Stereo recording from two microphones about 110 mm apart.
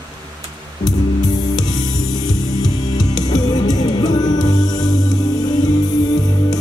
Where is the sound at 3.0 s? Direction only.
35° left (ahead or behind).